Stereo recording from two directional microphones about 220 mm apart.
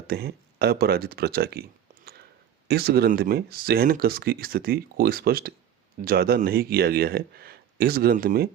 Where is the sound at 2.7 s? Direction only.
45° right (ahead or behind).